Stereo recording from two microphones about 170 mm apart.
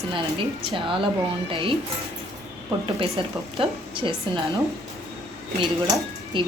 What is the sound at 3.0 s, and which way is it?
Speech, 35° right (ahead or behind).